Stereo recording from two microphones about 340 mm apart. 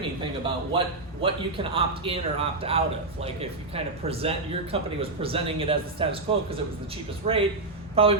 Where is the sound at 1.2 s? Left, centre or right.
Centre.